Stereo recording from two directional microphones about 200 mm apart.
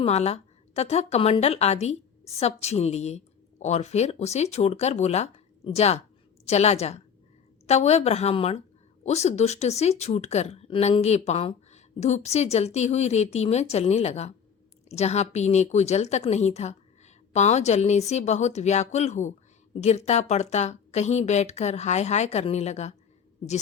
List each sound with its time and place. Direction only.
0.0 s a woman's voice: 30° left (ahead or behind)